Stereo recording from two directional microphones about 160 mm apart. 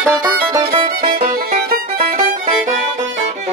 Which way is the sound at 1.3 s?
65° right (ahead or behind).